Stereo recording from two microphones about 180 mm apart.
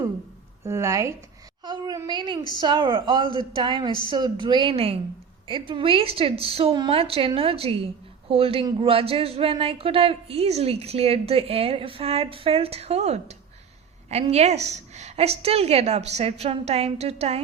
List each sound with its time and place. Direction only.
0.6 s a woman's voice: 15° right (ahead or behind); by 17.4 s 35° right (ahead or behind)